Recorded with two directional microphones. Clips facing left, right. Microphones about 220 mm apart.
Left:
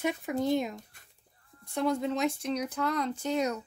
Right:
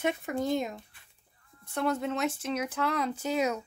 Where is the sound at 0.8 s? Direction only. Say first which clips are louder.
Left 1 dB; 45° left (ahead or behind).